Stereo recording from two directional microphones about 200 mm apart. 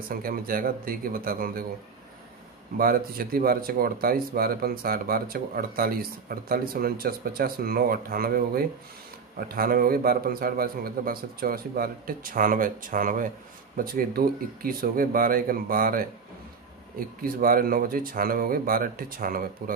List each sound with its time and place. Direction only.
0.1 s speech: 45° right (ahead or behind)
2.8 s speech: 45° right (ahead or behind)
17.2 s speech: 45° right (ahead or behind)